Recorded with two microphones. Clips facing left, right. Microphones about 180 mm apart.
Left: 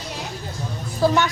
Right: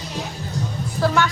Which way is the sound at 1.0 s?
20° left (ahead or behind).